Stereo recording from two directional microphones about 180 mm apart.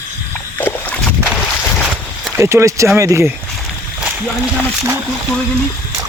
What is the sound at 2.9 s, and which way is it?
Speech, 15° right (ahead or behind).